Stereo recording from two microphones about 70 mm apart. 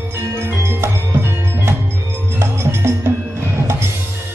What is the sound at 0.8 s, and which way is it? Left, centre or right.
Music, right.